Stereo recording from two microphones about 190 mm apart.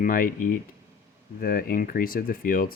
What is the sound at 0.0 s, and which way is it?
Speech, 50° left (ahead or behind).